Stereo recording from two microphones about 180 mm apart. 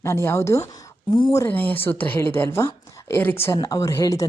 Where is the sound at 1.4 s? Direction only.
10° left (ahead or behind).